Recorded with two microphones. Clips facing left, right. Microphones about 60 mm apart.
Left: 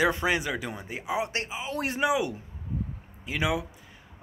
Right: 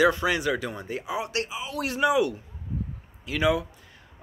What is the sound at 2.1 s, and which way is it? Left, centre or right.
Speech, centre.